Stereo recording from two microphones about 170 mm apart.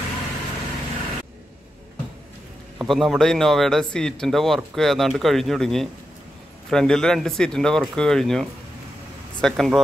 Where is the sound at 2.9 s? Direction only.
Centre (ahead or behind).